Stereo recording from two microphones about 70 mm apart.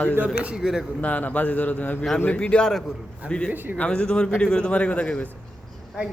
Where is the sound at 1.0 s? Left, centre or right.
Left.